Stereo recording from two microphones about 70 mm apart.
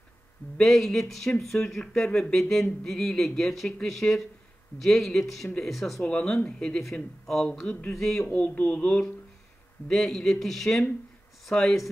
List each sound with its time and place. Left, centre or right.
0.6 s speech: centre
8.4 s speech: left
9.8 s speech: centre